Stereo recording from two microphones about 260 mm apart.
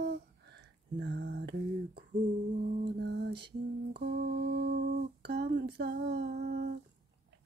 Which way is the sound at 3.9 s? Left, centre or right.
Right.